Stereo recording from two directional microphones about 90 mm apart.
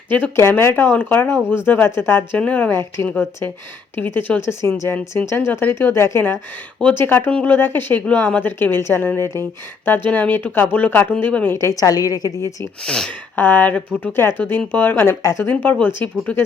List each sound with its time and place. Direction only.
0.1 s a woman's voice: 25° left (ahead or behind)
11.5 s a woman's voice: 35° left (ahead or behind)
12.8 s speech: 5° left (ahead or behind)
13.3 s a woman's voice: 20° left (ahead or behind)
15.2 s a woman's voice: 30° left (ahead or behind)
15.4 s a woman's voice: 20° left (ahead or behind)